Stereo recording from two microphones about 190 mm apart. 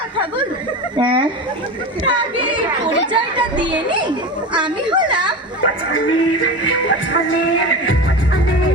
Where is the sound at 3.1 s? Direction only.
25° right (ahead or behind).